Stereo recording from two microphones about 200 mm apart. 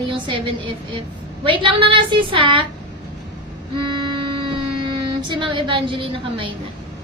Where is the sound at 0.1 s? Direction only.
25° right (ahead or behind).